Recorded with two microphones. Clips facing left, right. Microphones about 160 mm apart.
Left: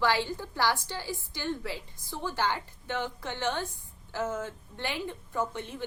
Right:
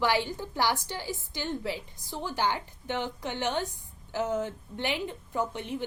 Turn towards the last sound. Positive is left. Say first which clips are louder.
# right 1 dB
turn(degrees=-15)  # may be behind; listen again after turning